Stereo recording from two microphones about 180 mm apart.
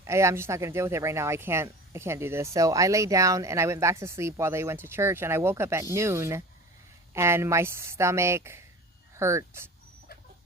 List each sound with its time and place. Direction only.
0.0 s speech: 15° right (ahead or behind)